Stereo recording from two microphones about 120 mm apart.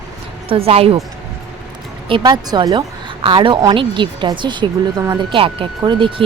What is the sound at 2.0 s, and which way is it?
A woman's voice, 40° right (ahead or behind).